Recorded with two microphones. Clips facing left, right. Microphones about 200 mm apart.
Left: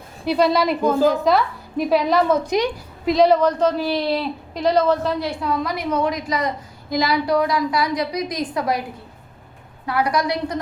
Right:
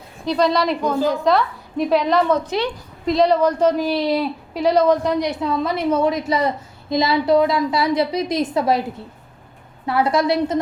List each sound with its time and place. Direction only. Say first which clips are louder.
0.3 s a woman's voice: even; 5° left (ahead or behind)
3.1 s a woman's voice: left 1 dB; centre (ahead or behind)
3.4 s a woman's voice: right 2 dB; 10° right (ahead or behind)
9.8 s a woman's voice: right 3 dB; 25° right (ahead or behind)